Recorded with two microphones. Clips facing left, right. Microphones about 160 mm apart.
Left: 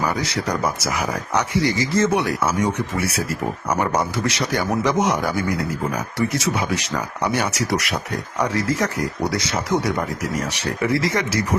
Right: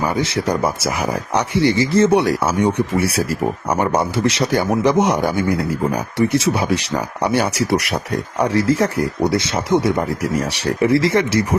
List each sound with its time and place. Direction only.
0.0 s speech: 25° right (ahead or behind)